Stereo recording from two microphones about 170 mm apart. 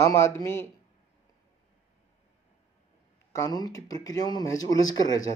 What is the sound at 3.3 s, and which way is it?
A man's voice, 20° left (ahead or behind).